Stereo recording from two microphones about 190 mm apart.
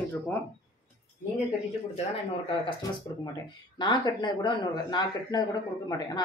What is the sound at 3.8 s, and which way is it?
Speech, 20° left (ahead or behind).